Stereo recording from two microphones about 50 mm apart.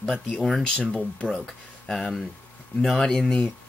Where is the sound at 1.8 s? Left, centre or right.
Centre.